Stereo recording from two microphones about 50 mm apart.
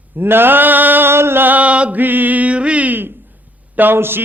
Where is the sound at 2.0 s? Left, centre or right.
Right.